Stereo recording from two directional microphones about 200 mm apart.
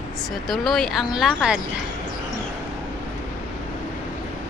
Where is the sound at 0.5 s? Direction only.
Centre (ahead or behind).